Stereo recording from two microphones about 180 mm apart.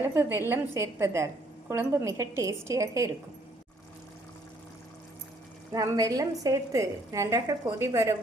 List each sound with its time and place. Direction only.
0.1 s a woman's voice: 15° right (ahead or behind)
5.7 s a woman's voice: 20° right (ahead or behind)